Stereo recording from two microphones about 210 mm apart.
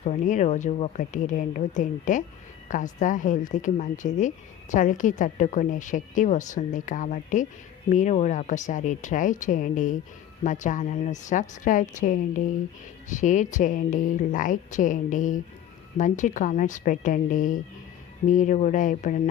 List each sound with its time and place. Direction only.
0.0 s speech: 35° left (ahead or behind)